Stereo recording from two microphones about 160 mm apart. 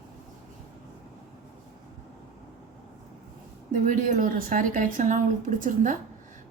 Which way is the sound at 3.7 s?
55° right (ahead or behind).